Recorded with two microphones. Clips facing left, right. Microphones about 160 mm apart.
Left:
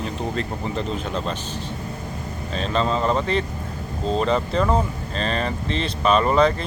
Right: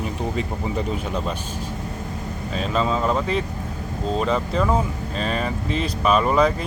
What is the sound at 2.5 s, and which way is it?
Speech, 5° right (ahead or behind).